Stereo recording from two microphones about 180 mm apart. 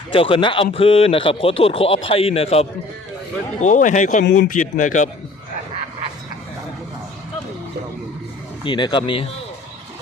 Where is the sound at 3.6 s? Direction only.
45° left (ahead or behind).